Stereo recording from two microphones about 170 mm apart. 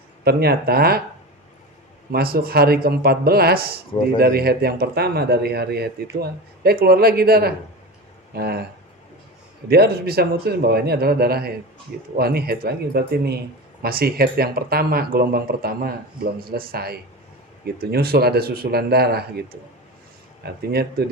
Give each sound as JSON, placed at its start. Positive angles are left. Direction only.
{"t": 0.3, "sound": "speech", "side_deg": -65}
{"t": 2.1, "sound": "a man's voice", "side_deg": -60}
{"t": 9.6, "sound": "a man's voice", "side_deg": -65}